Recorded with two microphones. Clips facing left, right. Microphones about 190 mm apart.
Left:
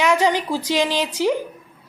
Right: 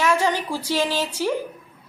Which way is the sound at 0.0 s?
15° left (ahead or behind).